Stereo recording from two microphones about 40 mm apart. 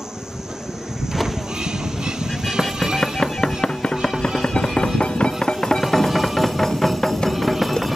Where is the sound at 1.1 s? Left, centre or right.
Centre.